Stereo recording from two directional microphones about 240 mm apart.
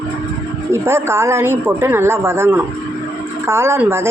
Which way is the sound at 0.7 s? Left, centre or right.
Centre.